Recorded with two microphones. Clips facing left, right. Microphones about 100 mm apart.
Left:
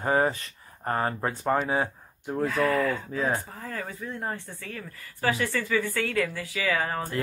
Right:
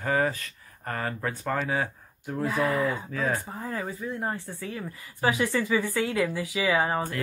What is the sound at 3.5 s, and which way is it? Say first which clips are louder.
Speech: right 3 dB; 20° right (ahead or behind).